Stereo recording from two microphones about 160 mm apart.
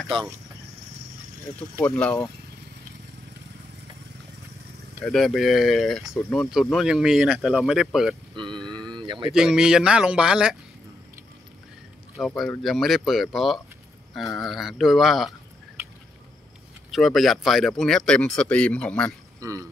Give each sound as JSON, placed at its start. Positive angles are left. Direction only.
{"t": 0.1, "sound": "speech", "side_deg": -25}
{"t": 1.9, "sound": "speech", "side_deg": 5}
{"t": 5.0, "sound": "speech", "side_deg": 0}
{"t": 8.8, "sound": "a sound", "side_deg": -30}
{"t": 9.3, "sound": "speech", "side_deg": -5}
{"t": 12.2, "sound": "speech", "side_deg": 5}
{"t": 16.9, "sound": "speech", "side_deg": 0}
{"t": 19.4, "sound": "speech", "side_deg": -20}